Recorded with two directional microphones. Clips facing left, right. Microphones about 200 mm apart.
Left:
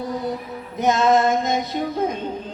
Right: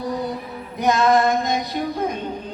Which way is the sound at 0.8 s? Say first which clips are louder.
Even; 25° left (ahead or behind).